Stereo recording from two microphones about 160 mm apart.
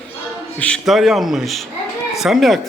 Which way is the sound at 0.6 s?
5° left (ahead or behind).